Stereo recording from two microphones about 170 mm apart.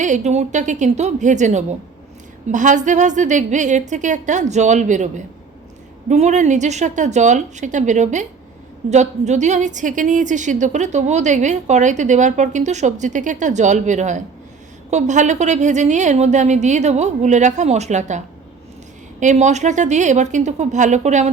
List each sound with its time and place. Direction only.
0.0 s a woman's voice: 45° right (ahead or behind)
19.2 s a woman's voice: 45° right (ahead or behind)